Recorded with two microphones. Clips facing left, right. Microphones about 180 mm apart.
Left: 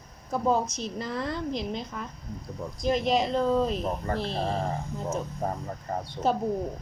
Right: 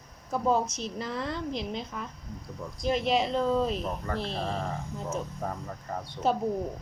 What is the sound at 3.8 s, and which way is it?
Speech, 35° left (ahead or behind).